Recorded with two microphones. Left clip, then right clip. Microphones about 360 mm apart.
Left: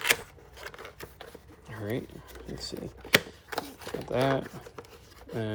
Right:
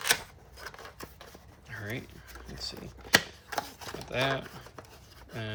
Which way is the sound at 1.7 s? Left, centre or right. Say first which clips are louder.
Left 4 dB; centre.